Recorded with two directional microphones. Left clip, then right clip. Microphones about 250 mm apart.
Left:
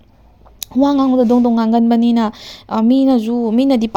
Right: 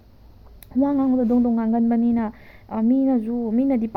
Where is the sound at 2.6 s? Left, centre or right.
Left.